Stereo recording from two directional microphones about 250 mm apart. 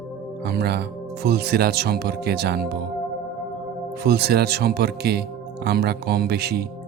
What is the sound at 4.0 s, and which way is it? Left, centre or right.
Speech, right.